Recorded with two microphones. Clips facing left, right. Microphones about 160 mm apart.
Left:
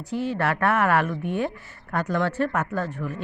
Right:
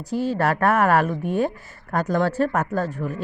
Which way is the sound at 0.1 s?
40° right (ahead or behind).